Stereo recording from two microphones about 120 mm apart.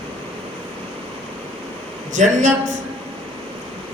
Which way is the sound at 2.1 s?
90° right.